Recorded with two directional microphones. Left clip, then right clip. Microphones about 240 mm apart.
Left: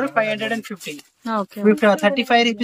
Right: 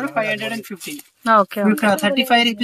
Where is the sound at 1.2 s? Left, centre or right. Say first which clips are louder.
Right 5 dB; centre.